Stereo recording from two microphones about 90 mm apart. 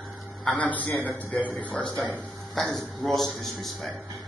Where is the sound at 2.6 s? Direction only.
5° left (ahead or behind).